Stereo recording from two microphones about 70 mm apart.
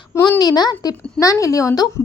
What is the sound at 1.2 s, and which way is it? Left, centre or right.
Speech, left.